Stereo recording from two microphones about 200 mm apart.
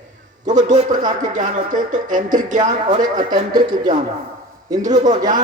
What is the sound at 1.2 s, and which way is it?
Speech, 40° right (ahead or behind).